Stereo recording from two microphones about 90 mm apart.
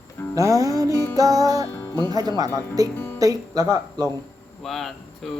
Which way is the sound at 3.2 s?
40° right (ahead or behind).